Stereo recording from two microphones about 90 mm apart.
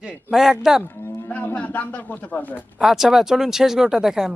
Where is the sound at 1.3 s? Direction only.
15° left (ahead or behind).